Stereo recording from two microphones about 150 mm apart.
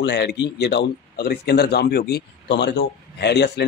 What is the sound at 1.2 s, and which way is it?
Speech, 90° left.